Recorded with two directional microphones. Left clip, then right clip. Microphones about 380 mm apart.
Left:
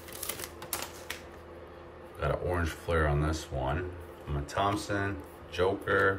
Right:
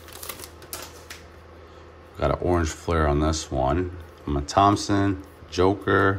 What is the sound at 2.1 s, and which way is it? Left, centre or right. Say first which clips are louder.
Speech: right 8 dB; centre.